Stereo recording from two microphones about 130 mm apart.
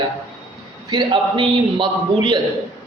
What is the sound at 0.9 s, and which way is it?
A man's voice, 40° right (ahead or behind).